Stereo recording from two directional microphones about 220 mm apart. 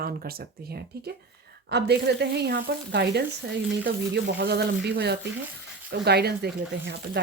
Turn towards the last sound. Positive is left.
turn(degrees=-50)  # may be behind; listen again after turning